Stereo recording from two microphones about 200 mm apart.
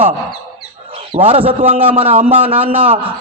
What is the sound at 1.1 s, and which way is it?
A man's voice, 30° right (ahead or behind).